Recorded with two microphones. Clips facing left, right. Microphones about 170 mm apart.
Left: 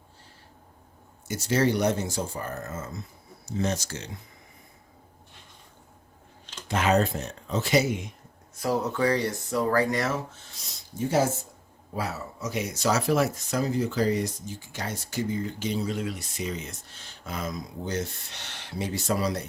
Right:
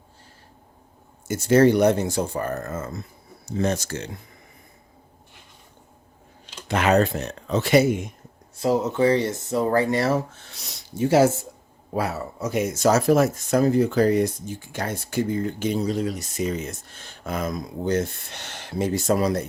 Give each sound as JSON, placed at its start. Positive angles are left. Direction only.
{"t": 1.3, "sound": "speech", "side_deg": -50}
{"t": 6.4, "sound": "a sound", "side_deg": -10}
{"t": 6.7, "sound": "speech", "side_deg": -70}
{"t": 8.5, "sound": "speech", "side_deg": -25}
{"t": 10.4, "sound": "speech", "side_deg": -70}
{"t": 11.9, "sound": "speech", "side_deg": -60}